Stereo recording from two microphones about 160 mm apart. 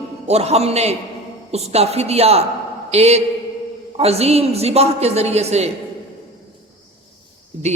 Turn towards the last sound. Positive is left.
turn(degrees=-45)  # may be behind; listen again after turning